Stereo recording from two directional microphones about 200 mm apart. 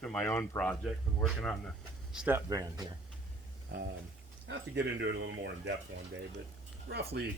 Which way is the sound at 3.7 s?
55° right (ahead or behind).